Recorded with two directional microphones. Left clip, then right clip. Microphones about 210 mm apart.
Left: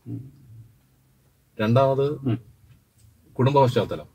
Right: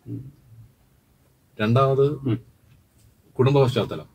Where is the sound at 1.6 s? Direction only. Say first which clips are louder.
Even; 15° right (ahead or behind).